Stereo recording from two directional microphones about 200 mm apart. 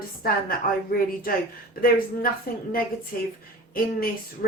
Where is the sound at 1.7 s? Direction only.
45° left (ahead or behind).